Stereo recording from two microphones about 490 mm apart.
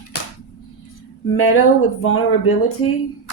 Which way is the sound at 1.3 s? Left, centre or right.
Left.